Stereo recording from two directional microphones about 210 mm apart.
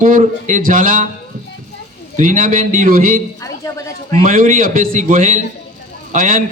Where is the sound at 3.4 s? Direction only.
15° left (ahead or behind).